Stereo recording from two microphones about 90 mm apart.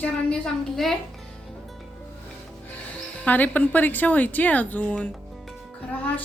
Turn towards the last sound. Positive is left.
turn(degrees=15)  # may be behind; listen again after turning